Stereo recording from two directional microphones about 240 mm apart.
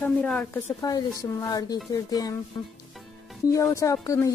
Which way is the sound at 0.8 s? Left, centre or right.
Centre.